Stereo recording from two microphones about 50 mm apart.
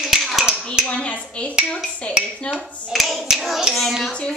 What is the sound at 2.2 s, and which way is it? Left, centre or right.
Dishes, centre.